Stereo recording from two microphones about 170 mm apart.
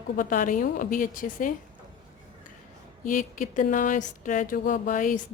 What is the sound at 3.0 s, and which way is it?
Speech, 50° left (ahead or behind).